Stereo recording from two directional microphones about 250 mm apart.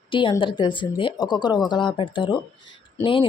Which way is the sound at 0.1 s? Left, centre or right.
Centre.